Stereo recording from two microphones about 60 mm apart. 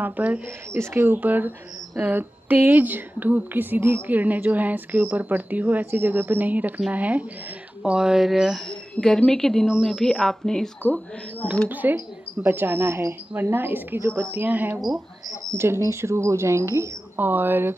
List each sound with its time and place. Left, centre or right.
0.0 s a woman's voice: right
0.7 s a woman's voice: right
7.8 s speech: centre
9.0 s speech: left
9.3 s speech: centre
11.7 s speech: right
15.5 s speech: right
17.2 s speech: right